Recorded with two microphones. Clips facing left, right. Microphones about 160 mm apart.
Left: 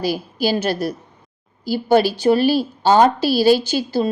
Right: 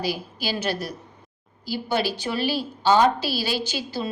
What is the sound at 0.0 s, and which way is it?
A woman's voice, 50° left (ahead or behind).